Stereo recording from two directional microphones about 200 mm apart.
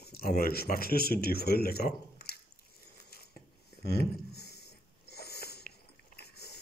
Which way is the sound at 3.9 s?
55° left (ahead or behind).